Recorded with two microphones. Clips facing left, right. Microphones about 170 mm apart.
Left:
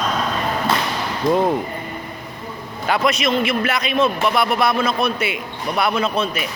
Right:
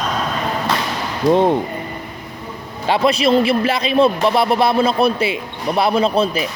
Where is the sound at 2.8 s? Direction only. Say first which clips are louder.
Right 4 dB; 30° right (ahead or behind).